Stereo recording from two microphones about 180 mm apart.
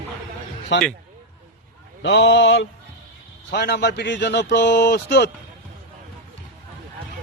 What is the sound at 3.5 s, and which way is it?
A man's voice, 65° left (ahead or behind).